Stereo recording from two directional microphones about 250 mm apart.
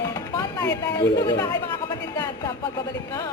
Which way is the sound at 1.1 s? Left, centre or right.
Centre.